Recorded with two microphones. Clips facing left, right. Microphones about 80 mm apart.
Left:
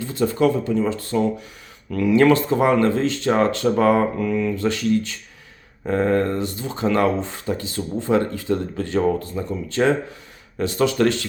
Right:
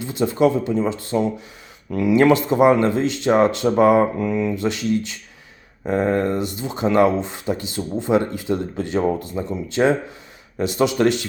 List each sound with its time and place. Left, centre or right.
0.0 s speech: centre